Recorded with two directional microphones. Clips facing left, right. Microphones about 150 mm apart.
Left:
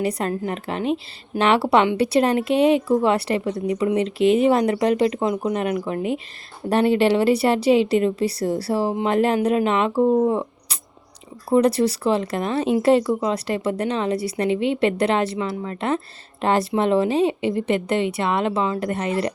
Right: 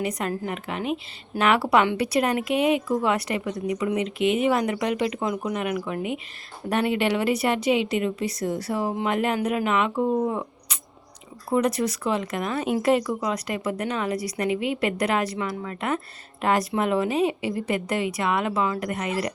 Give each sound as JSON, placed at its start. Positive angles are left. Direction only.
{"t": 0.0, "sound": "a woman's voice", "side_deg": 30}